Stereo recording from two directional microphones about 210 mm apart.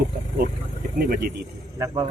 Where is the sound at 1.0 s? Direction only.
45° right (ahead or behind).